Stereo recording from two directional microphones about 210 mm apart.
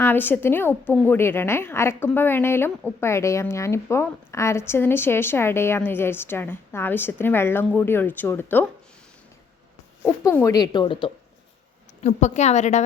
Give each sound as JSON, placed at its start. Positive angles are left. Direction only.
{"t": 0.0, "sound": "a woman's voice", "side_deg": 10}
{"t": 10.0, "sound": "a woman's voice", "side_deg": 10}
{"t": 12.0, "sound": "a woman's voice", "side_deg": 35}